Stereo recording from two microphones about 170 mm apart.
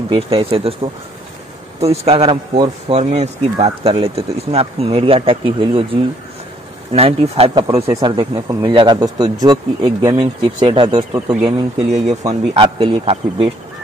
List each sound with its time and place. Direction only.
0.1 s speech: 35° right (ahead or behind)
1.8 s speech: 35° right (ahead or behind)
6.9 s speech: 35° right (ahead or behind)
7.8 s speech: 20° right (ahead or behind)
8.2 s speech: 30° right (ahead or behind)
11.9 s speech: 40° right (ahead or behind)
12.2 s speech: 25° right (ahead or behind)